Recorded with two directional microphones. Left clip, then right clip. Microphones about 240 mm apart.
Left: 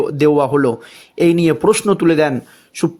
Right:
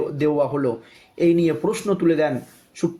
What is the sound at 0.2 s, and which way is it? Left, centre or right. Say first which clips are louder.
Speech: left 8 dB; left.